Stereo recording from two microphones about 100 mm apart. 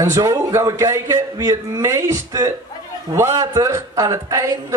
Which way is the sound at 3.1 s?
30° right (ahead or behind).